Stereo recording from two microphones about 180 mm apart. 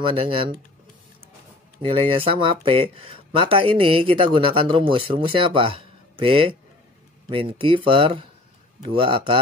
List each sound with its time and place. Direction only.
0.1 s speech: 30° right (ahead or behind)
1.8 s speech: 30° right (ahead or behind)